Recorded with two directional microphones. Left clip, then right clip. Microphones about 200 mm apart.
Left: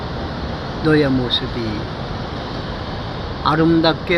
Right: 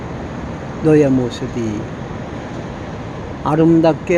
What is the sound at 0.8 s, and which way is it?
Speech, 35° right (ahead or behind).